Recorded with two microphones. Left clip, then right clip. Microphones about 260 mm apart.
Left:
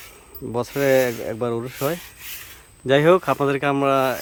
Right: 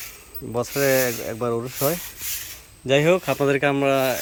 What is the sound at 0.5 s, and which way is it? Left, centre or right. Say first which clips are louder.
Speech: left 2 dB; centre.